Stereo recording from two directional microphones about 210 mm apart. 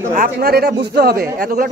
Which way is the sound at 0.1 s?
45° right (ahead or behind).